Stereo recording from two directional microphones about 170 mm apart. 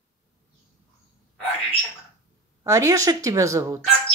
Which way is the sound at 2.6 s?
20° right (ahead or behind).